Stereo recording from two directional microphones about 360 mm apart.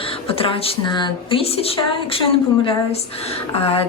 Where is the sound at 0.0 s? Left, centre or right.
Centre.